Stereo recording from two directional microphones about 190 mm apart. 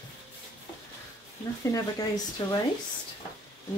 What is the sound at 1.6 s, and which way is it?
Speech, 15° left (ahead or behind).